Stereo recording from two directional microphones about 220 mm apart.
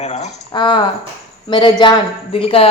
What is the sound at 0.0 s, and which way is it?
A woman's voice, 30° left (ahead or behind).